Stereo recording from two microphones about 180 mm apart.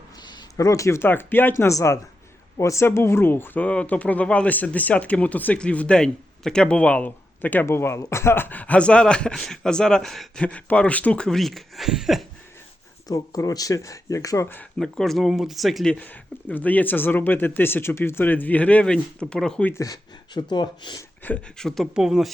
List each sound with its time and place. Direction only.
0.2 s speech: 25° left (ahead or behind); by 12.2 s centre (ahead or behind)
13.1 s speech: 20° left (ahead or behind)
21.2 s speech: 10° left (ahead or behind)